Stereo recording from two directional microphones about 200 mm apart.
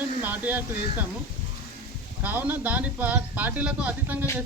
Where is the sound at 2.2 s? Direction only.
10° right (ahead or behind).